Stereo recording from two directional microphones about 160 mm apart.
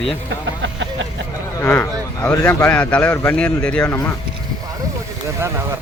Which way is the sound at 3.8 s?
20° left (ahead or behind).